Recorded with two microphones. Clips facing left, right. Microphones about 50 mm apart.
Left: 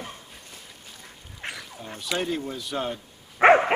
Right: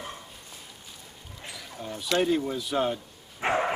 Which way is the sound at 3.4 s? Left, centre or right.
Left.